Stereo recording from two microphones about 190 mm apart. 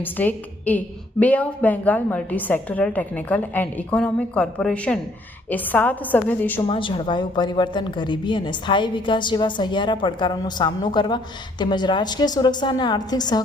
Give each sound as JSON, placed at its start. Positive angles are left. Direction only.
{"t": 0.0, "sound": "a woman's voice", "side_deg": 10}
{"t": 6.6, "sound": "a woman's voice", "side_deg": 25}